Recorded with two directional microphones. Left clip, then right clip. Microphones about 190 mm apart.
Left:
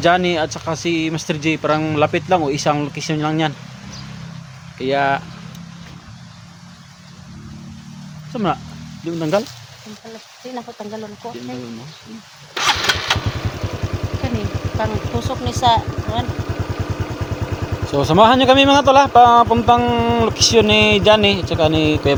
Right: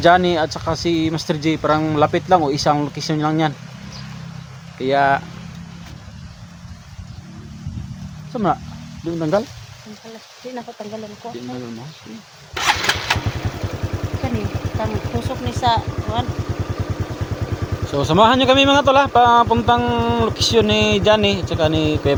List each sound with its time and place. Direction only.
0.0 s speech: 10° right (ahead or behind)
4.8 s speech: 10° right (ahead or behind)
8.3 s speech: centre (ahead or behind)
12.5 s engine starting: 15° left (ahead or behind)
14.8 s speech: 15° left (ahead or behind)
15.6 s speech: 55° left (ahead or behind)
17.8 s speech: 10° left (ahead or behind)